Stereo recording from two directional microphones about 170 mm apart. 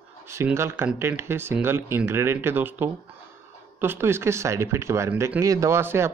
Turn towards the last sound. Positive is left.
turn(degrees=-15)  # may be behind; listen again after turning